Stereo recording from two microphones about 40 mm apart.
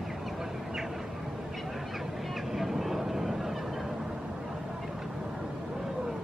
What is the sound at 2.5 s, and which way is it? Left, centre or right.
Vehicle, centre.